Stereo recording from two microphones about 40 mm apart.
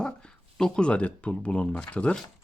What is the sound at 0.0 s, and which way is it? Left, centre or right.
Speech, left.